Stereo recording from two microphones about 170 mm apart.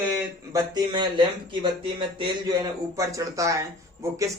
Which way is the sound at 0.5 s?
25° right (ahead or behind).